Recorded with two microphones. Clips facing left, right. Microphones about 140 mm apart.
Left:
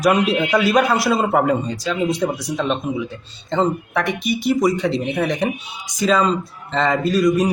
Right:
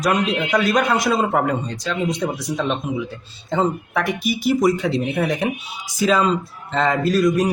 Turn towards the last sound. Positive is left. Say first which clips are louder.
# left 1 dB
turn(degrees=0)  # may be behind; listen again after turning